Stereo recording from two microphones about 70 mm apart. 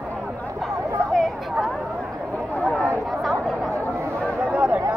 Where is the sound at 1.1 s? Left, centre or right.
Centre.